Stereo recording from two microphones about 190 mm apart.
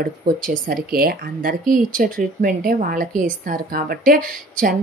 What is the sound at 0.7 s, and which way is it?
A woman's voice, 50° right (ahead or behind).